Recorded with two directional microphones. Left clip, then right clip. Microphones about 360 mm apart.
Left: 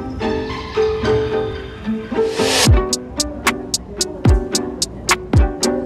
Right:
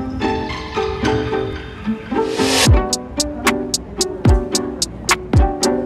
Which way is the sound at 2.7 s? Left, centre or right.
Centre.